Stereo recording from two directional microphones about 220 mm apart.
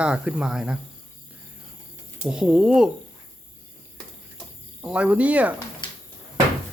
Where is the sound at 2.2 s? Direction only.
5° right (ahead or behind).